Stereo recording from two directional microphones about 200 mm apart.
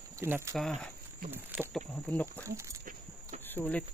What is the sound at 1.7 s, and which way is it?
Speech, 10° left (ahead or behind).